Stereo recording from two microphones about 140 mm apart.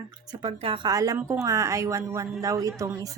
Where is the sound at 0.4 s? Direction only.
35° right (ahead or behind).